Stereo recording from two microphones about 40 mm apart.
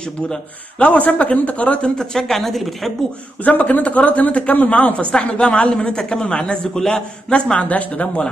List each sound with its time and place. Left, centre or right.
0.7 s speech: left
2.0 s speech: centre
3.4 s speech: left
7.6 s speech: left